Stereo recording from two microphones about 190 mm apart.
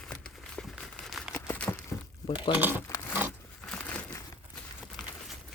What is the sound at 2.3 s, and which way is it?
Speech, 25° left (ahead or behind).